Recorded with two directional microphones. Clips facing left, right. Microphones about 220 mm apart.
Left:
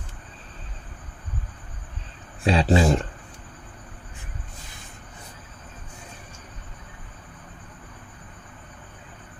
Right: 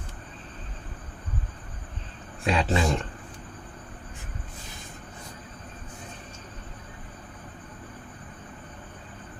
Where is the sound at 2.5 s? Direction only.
30° left (ahead or behind).